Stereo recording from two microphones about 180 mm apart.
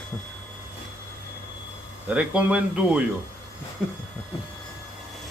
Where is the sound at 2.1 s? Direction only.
5° right (ahead or behind).